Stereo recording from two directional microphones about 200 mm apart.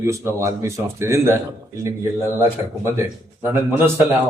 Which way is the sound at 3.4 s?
10° right (ahead or behind).